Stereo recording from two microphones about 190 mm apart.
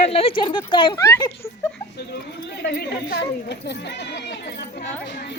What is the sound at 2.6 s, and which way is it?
Speech, 55° left (ahead or behind).